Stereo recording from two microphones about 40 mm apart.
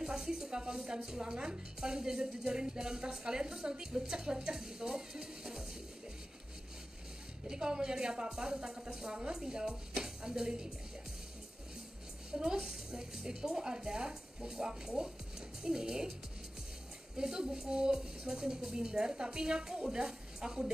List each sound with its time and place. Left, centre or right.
0.0 s speech: centre
7.4 s speech: centre
12.3 s a woman's voice: centre
17.2 s a woman's voice: centre